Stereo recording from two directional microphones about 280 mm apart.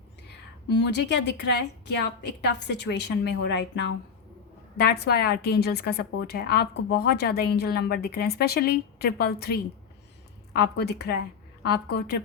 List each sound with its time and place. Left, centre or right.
0.7 s a woman's voice: left